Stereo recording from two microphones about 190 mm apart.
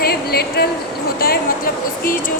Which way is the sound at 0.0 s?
55° left (ahead or behind).